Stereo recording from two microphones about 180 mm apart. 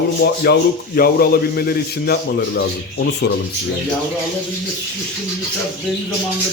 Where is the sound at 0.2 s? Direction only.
60° left (ahead or behind).